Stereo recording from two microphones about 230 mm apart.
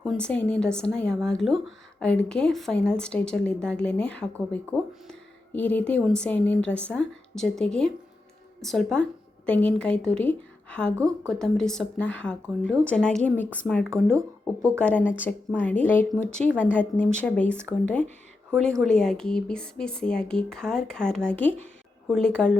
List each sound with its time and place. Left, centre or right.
0.0 s speech: centre
10.9 s a woman's voice: centre
11.3 s speech: centre
13.9 s a woman's voice: centre
14.8 s a woman's voice: centre